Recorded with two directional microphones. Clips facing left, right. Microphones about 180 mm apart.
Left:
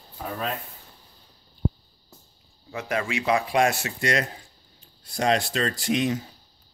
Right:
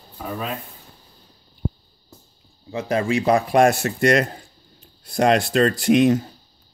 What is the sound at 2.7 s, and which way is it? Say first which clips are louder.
Speech: right 7 dB; 30° right (ahead or behind).